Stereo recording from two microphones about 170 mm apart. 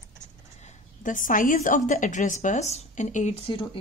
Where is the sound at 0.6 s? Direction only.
50° left (ahead or behind).